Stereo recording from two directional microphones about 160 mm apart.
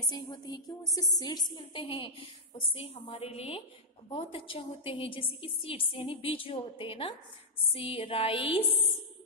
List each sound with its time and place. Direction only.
0.1 s music: 25° left (ahead or behind)
1.5 s a woman's voice: 30° left (ahead or behind)